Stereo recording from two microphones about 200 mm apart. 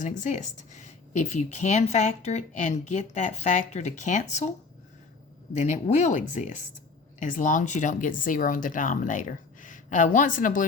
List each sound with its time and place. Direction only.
0.0 s a woman's voice: 40° left (ahead or behind)
5.5 s a woman's voice: 35° left (ahead or behind)